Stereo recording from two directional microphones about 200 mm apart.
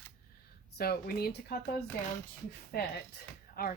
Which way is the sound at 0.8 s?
50° left (ahead or behind).